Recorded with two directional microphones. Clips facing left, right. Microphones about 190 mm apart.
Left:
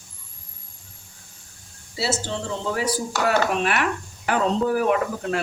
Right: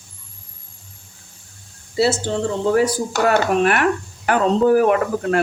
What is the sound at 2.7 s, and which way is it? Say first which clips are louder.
Speech: right 7 dB; 50° right (ahead or behind).